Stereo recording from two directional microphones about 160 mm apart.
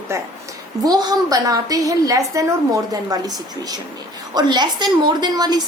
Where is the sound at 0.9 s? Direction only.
20° right (ahead or behind).